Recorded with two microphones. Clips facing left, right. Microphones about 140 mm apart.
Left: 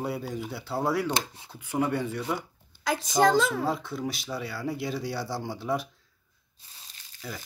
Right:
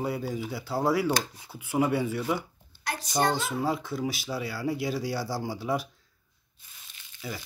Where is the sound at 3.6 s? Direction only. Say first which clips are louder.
Right 1 dB; centre (ahead or behind).